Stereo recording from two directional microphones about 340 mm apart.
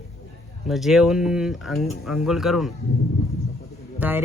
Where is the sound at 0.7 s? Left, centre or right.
Centre.